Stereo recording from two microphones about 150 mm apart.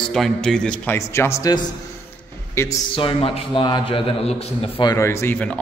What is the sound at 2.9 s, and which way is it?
A man's voice, 40° left (ahead or behind).